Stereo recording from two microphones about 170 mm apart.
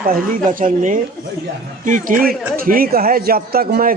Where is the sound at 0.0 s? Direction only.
55° right (ahead or behind).